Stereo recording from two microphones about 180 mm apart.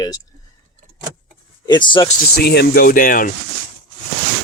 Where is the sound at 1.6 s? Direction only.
25° left (ahead or behind).